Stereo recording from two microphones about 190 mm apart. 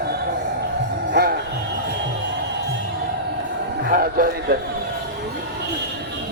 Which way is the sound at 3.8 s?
50° right (ahead or behind).